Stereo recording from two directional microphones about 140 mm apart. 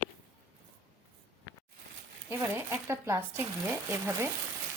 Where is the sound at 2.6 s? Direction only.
15° right (ahead or behind).